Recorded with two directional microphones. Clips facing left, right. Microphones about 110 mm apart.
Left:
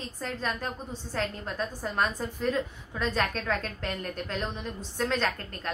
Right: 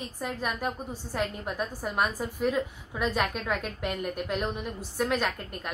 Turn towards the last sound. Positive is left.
turn(degrees=-10)  # may be behind; listen again after turning